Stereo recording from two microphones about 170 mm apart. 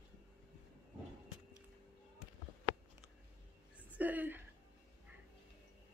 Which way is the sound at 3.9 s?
10° right (ahead or behind).